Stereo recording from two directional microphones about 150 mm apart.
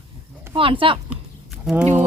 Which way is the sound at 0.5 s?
35° right (ahead or behind).